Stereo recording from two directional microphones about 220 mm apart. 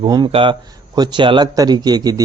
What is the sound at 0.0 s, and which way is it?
A man's voice, 20° right (ahead or behind).